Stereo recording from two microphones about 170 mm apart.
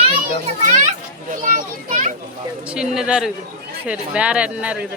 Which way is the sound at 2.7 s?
5° right (ahead or behind).